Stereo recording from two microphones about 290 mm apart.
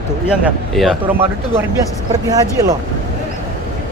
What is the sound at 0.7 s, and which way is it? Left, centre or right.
Speech, centre.